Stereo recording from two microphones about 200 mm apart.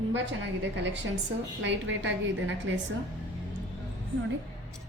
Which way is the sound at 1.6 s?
65° right (ahead or behind).